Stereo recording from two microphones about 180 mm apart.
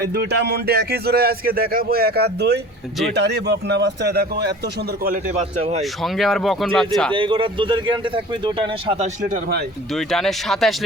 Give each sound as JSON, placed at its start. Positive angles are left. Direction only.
{"t": 0.1, "sound": "a man's voice", "side_deg": -70}
{"t": 5.3, "sound": "speech", "side_deg": -35}
{"t": 5.8, "sound": "speech", "side_deg": 0}
{"t": 7.1, "sound": "a man's voice", "side_deg": -30}
{"t": 9.3, "sound": "a man's voice", "side_deg": -60}
{"t": 9.9, "sound": "speech", "side_deg": 0}